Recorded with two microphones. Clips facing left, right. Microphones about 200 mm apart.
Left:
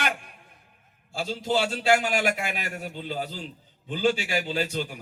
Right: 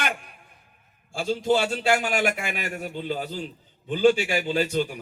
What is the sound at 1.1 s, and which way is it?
A man's voice, 50° right (ahead or behind).